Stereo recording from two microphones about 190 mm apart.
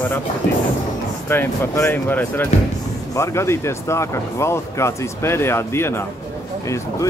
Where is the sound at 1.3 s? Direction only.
10° left (ahead or behind).